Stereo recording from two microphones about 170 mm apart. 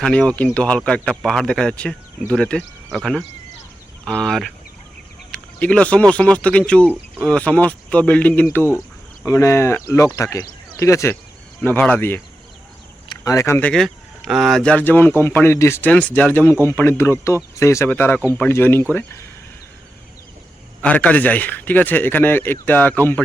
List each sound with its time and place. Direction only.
0.0 s speech: 5° left (ahead or behind)
6.8 s speech: 5° right (ahead or behind)
7.3 s speech: 5° left (ahead or behind)
20.8 s speech: 10° left (ahead or behind)